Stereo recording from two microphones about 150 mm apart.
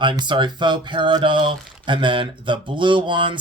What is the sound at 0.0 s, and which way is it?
Speech, 30° right (ahead or behind).